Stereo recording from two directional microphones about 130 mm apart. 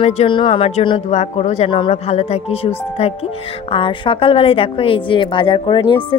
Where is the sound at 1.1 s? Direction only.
60° left (ahead or behind).